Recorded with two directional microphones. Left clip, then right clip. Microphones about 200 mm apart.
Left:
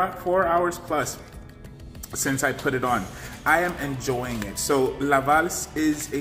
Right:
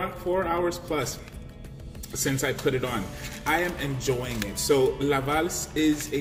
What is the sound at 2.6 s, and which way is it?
Speech, 5° left (ahead or behind).